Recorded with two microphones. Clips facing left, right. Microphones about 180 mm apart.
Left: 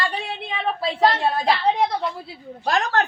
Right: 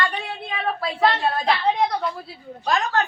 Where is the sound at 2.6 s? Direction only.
60° left (ahead or behind).